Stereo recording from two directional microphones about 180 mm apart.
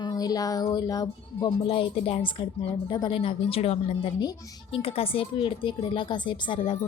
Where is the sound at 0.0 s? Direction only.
20° left (ahead or behind).